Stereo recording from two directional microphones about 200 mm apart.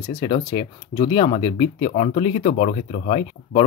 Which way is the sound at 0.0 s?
25° left (ahead or behind).